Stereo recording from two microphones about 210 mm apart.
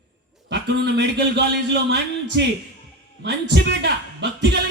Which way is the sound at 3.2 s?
55° right (ahead or behind).